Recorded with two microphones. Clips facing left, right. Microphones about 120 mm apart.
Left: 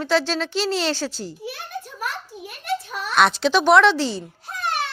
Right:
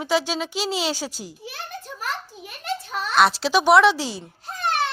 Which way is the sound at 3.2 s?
5° right (ahead or behind).